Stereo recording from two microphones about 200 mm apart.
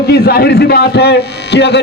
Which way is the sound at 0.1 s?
55° left (ahead or behind).